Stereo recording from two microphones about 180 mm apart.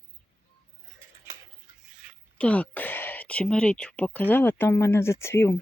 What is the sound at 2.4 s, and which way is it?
Speech, 10° left (ahead or behind).